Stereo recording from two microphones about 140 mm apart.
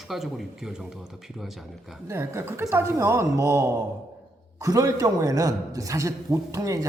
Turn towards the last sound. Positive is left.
turn(degrees=-25)  # may be behind; listen again after turning